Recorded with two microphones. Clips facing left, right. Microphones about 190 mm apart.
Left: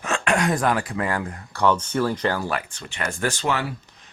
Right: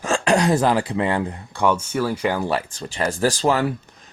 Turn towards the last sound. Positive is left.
turn(degrees=-35)  # may be behind; listen again after turning